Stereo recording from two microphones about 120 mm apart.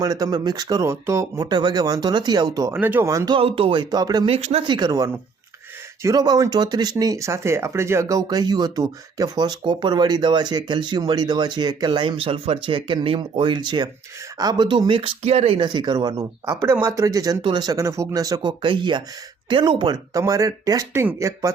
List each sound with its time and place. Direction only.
0.0 s speech: 30° right (ahead or behind)
2.8 s speech: 15° right (ahead or behind)
3.1 s speech: 30° right (ahead or behind)
3.3 s speech: 50° right (ahead or behind); by 4.3 s 35° right (ahead or behind)
4.3 s speech: 60° right (ahead or behind)
4.6 s speech: 40° right (ahead or behind); by 15.5 s 60° right (ahead or behind)
15.5 s speech: 40° right (ahead or behind)
18.6 s speech: 40° right (ahead or behind); by 21.5 s 25° right (ahead or behind)